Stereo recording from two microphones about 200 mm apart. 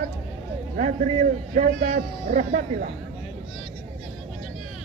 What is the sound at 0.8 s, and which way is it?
Speech, 40° right (ahead or behind).